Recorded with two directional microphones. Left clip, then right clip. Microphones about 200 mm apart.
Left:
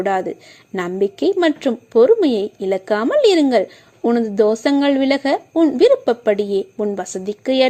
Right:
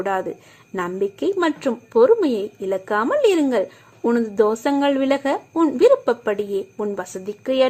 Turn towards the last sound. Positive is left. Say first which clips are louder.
# left 3 dB
turn(degrees=25)  # may be behind; listen again after turning